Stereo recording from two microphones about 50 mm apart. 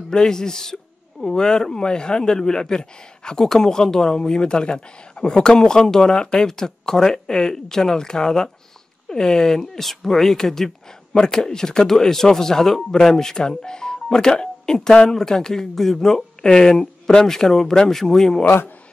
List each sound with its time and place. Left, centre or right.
0.1 s speech: centre